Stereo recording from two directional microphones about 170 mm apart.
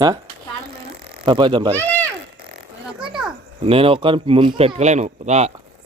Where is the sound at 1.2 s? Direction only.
30° right (ahead or behind).